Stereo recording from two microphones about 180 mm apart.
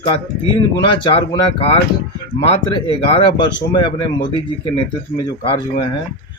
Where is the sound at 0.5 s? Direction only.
25° left (ahead or behind).